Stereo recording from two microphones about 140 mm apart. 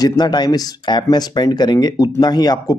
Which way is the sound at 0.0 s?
30° left (ahead or behind).